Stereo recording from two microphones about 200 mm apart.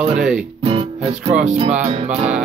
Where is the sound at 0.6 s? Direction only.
30° right (ahead or behind).